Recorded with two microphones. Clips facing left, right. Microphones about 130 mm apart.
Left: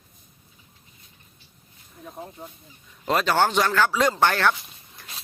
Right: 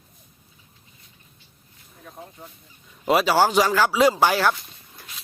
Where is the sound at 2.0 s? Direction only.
15° left (ahead or behind).